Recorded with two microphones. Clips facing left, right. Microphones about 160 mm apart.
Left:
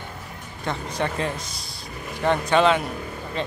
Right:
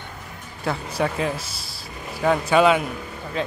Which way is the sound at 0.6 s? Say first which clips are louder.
Right 3 dB; 5° right (ahead or behind).